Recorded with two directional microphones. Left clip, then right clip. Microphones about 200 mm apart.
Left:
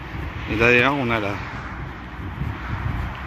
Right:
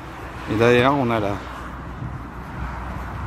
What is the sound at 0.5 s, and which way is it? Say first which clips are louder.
Speech: even; 20° right (ahead or behind).